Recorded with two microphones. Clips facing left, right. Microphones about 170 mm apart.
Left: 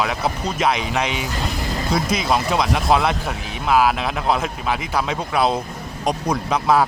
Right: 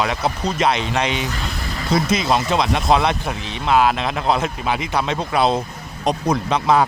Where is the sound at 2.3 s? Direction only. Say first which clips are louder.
Left 1 dB; centre (ahead or behind).